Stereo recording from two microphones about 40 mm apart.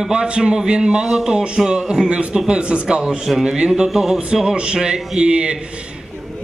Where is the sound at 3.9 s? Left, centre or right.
Centre.